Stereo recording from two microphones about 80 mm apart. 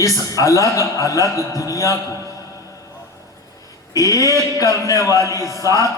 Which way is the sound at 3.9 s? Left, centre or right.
Left.